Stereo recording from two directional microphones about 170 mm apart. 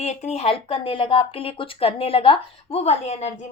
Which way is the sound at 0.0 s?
40° left (ahead or behind).